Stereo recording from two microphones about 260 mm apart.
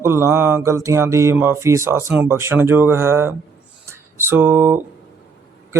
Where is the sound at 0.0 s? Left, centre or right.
Centre.